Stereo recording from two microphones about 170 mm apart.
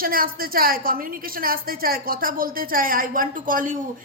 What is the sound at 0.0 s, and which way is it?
A woman's voice, 60° right (ahead or behind).